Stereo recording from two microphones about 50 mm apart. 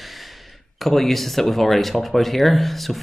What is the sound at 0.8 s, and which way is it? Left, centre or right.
Speech, centre.